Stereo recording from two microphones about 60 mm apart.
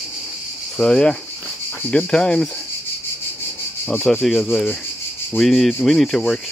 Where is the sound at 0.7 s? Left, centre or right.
Centre.